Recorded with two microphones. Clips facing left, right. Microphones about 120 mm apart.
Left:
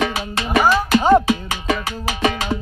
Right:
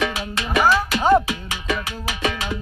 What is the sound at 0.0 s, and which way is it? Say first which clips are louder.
Music: left 2 dB; 35° left (ahead or behind).